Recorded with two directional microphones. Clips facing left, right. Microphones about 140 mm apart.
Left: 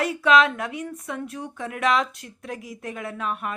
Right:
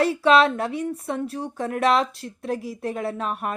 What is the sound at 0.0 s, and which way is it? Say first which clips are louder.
Speech: right 2 dB; 30° right (ahead or behind).